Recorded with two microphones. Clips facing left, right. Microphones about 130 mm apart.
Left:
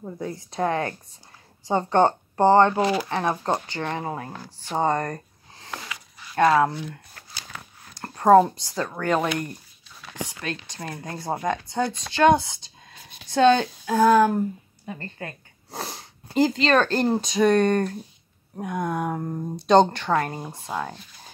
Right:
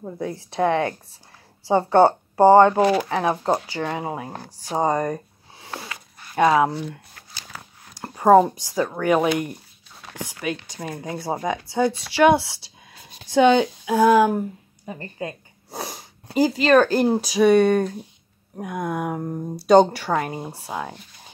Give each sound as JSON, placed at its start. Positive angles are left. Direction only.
{"t": 0.0, "sound": "speech", "side_deg": 0}
{"t": 15.7, "sound": "sneeze", "side_deg": -5}
{"t": 16.3, "sound": "speech", "side_deg": -5}